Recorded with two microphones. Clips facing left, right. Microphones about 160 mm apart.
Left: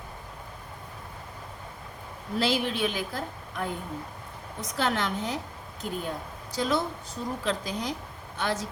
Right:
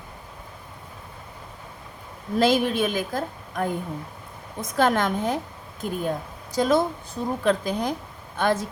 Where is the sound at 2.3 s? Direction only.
50° right (ahead or behind).